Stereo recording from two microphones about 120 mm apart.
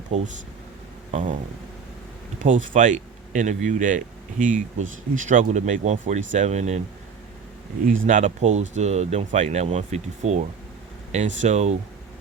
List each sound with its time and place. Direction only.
0.1 s speech: 65° right (ahead or behind)
1.1 s speech: 90° right
2.4 s speech: 90° right; by 6.8 s 70° right (ahead or behind)
8.0 s speech: 85° right; by 10.4 s 70° right (ahead or behind)
11.1 s speech: 90° right; by 11.8 s 70° right (ahead or behind)